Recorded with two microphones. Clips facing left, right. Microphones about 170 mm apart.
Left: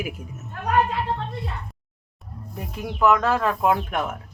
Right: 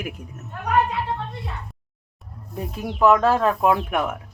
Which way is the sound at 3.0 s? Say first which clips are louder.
Right 3 dB; 30° right (ahead or behind).